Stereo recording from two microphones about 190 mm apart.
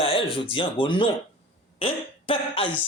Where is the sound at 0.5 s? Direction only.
25° left (ahead or behind).